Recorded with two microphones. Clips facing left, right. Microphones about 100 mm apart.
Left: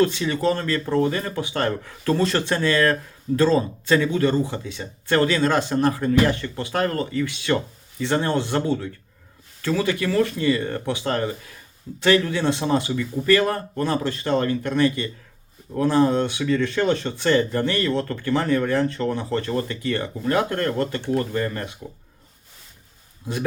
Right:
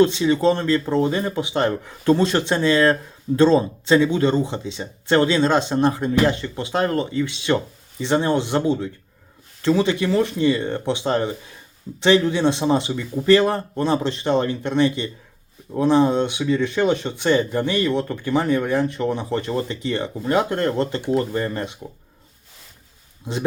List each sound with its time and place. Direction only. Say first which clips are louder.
0.0 s speech: right 4 dB; 20° right (ahead or behind)